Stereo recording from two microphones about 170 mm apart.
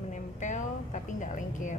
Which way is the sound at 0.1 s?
45° left (ahead or behind).